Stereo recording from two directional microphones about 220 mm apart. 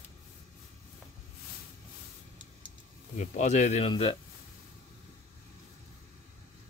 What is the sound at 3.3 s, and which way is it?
Speech, 30° left (ahead or behind).